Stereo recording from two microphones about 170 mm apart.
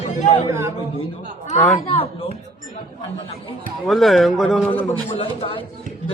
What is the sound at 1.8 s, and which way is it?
Speech, 35° left (ahead or behind).